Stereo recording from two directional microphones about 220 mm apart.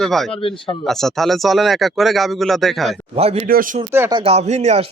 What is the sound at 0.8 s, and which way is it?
Speech, centre (ahead or behind).